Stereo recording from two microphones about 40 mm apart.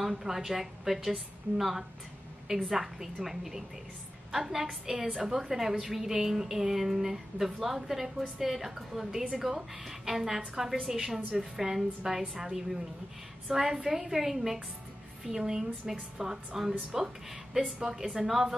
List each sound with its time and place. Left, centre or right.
0.1 s a woman's voice: centre
4.6 s a woman's voice: centre